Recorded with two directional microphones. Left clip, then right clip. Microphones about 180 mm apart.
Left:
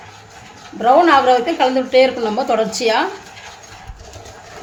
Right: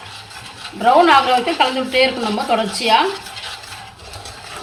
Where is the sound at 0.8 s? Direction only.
60° left (ahead or behind).